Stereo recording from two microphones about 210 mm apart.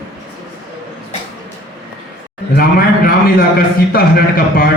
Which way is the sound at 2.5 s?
45° left (ahead or behind).